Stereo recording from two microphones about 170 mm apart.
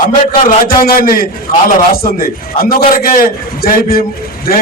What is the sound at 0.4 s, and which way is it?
A man's voice, 60° left (ahead or behind).